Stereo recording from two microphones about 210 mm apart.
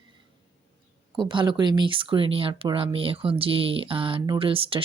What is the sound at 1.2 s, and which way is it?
Speech, 20° right (ahead or behind).